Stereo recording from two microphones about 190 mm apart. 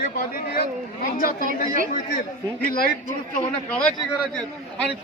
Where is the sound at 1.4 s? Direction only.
45° right (ahead or behind).